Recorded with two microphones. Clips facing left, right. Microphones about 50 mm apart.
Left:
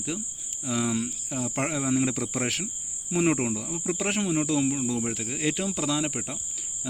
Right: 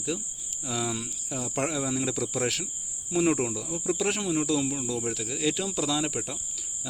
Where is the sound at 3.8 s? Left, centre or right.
Centre.